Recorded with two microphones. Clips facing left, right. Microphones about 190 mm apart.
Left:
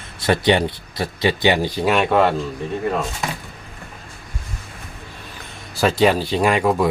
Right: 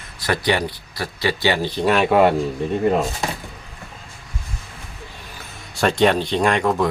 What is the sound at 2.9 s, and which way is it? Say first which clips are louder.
Speech: right 3 dB; 30° right (ahead or behind).